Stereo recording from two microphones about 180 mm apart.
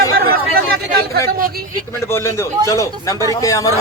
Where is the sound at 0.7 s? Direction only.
60° right (ahead or behind).